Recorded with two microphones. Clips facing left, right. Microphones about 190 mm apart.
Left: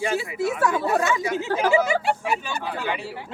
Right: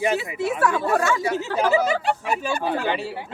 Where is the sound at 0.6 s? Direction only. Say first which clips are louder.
Right 2 dB; 25° left (ahead or behind).